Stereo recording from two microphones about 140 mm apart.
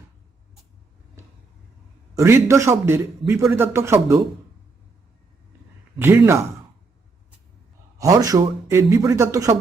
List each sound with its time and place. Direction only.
2.1 s a man's voice: 20° right (ahead or behind)
6.0 s a man's voice: 15° right (ahead or behind)
7.9 s a man's voice: 25° right (ahead or behind)